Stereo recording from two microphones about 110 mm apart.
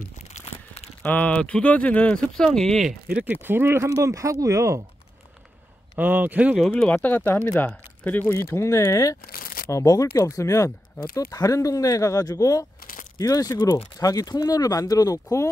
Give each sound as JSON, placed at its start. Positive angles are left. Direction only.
{"t": 0.5, "sound": "crumpling", "side_deg": 65}
{"t": 1.0, "sound": "speech", "side_deg": 15}
{"t": 3.1, "sound": "speech", "side_deg": -10}
{"t": 3.4, "sound": "speech", "side_deg": -20}
{"t": 5.9, "sound": "speech", "side_deg": -15}
{"t": 6.5, "sound": "speech", "side_deg": 5}